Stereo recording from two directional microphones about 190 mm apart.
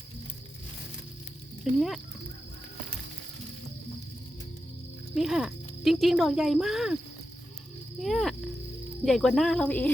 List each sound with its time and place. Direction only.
1.7 s speech: centre (ahead or behind)
5.1 s speech: centre (ahead or behind)
8.0 s speech: centre (ahead or behind)